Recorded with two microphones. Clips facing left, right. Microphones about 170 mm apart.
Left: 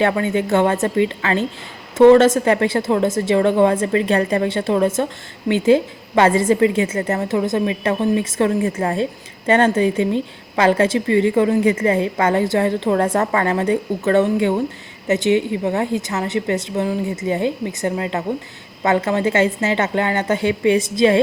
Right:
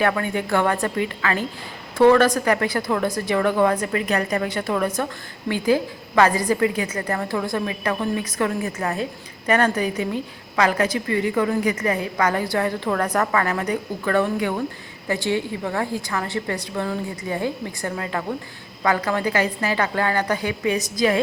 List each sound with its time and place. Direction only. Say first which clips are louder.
0.0 s a woman's voice: left 4 dB; 25° left (ahead or behind)